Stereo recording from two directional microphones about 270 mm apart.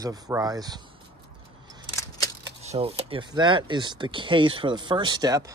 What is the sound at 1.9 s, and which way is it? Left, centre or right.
Scissors, centre.